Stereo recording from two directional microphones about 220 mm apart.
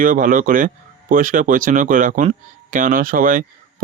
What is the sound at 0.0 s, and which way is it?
Speech, 35° right (ahead or behind).